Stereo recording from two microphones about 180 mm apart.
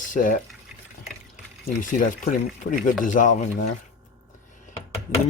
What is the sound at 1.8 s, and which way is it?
Speech, 45° left (ahead or behind).